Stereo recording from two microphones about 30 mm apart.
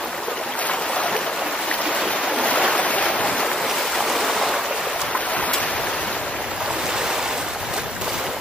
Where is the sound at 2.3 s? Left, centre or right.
Left.